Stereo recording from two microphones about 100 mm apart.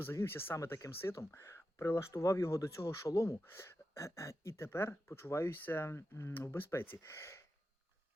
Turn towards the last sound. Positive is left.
turn(degrees=30)  # may be behind; listen again after turning